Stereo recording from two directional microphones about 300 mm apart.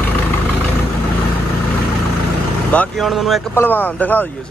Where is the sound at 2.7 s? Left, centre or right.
Centre.